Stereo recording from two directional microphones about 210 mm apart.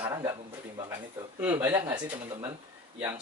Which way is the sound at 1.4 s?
10° right (ahead or behind).